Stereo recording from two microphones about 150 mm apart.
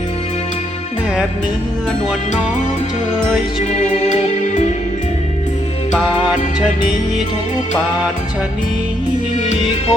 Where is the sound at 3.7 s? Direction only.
50° left (ahead or behind).